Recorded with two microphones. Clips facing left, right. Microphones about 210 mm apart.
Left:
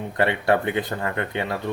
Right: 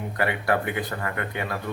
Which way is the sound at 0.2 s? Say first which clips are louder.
Left 4 dB; 25° left (ahead or behind).